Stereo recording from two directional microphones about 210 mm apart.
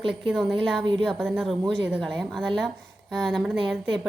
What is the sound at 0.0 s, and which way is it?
Speech, centre (ahead or behind).